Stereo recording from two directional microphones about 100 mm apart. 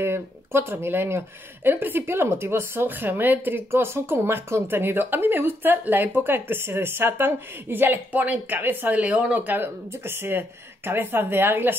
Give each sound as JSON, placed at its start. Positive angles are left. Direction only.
{"t": 0.0, "sound": "speech", "side_deg": -25}